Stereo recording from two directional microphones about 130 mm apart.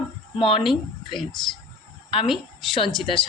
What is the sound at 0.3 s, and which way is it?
Speech, 40° left (ahead or behind).